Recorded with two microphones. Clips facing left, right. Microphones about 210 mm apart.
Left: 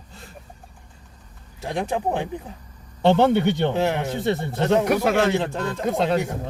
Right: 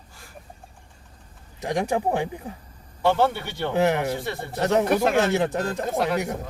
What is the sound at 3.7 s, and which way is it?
Speech, 15° right (ahead or behind).